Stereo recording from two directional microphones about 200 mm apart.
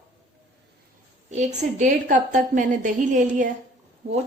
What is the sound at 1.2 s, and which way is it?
A woman's voice, 35° right (ahead or behind).